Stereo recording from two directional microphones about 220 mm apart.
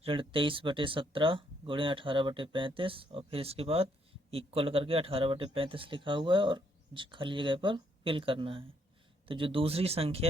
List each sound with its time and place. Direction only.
0.0 s speech: 25° right (ahead or behind)